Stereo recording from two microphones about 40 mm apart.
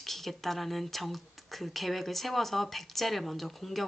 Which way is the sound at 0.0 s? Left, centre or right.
Centre.